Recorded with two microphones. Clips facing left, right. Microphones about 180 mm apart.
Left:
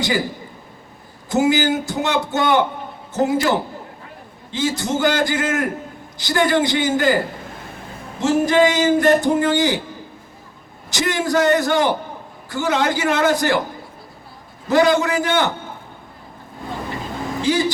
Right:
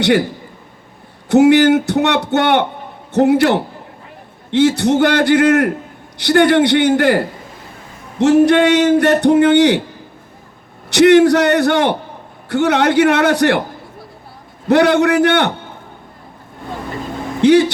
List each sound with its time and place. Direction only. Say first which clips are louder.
1.3 s a man's voice: right 8 dB; 65° right (ahead or behind)
8.2 s a man's voice: right 5 dB; 65° right (ahead or behind)
10.8 s a man's voice: right 13 dB; 65° right (ahead or behind)
14.7 s a man's voice: right 4 dB; 65° right (ahead or behind)
17.4 s speech: right 10 dB; 65° right (ahead or behind)